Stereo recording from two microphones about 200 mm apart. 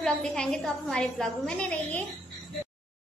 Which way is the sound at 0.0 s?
5° left (ahead or behind).